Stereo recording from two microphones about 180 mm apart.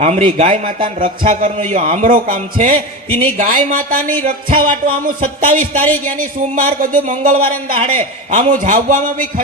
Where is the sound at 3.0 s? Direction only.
10° left (ahead or behind).